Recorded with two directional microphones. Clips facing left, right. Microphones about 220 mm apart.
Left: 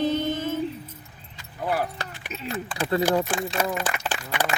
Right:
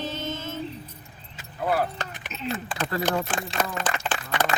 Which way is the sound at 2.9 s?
15° left (ahead or behind).